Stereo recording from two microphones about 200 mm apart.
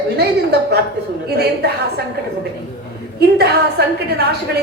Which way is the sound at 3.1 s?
55° right (ahead or behind).